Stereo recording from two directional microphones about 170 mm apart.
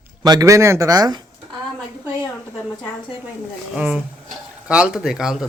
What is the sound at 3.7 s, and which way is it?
Speech, 10° right (ahead or behind).